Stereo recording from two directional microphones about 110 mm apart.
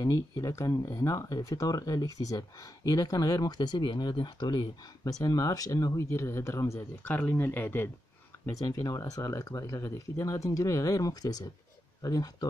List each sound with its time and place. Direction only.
0.0 s speech: 30° left (ahead or behind)
8.5 s speech: 30° left (ahead or behind)